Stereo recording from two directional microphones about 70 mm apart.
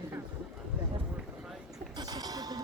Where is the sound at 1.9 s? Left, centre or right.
Right.